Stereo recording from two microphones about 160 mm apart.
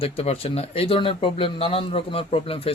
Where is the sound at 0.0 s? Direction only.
35° left (ahead or behind).